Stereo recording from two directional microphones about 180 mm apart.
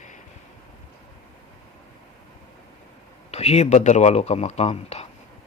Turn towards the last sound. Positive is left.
turn(degrees=35)  # may be behind; listen again after turning